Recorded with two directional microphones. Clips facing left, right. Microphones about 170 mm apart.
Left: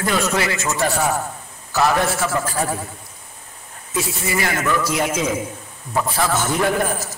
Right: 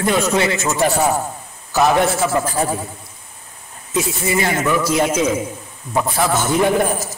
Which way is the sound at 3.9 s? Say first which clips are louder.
Right 4 dB; 25° right (ahead or behind).